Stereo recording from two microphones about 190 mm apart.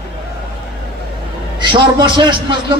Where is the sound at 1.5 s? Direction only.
25° right (ahead or behind).